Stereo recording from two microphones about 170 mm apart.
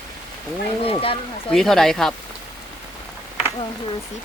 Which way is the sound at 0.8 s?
35° left (ahead or behind).